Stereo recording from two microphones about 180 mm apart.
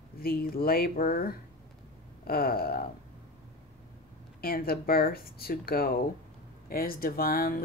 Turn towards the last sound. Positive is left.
turn(degrees=55)  # may be behind; listen again after turning